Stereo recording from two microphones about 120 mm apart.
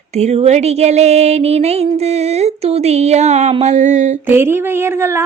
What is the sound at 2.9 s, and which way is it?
Speech, 65° right (ahead or behind).